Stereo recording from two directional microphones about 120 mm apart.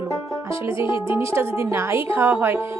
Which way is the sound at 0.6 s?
45° left (ahead or behind).